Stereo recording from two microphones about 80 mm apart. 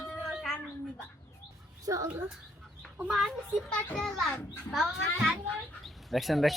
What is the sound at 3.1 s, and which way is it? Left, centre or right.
A child's voice, centre.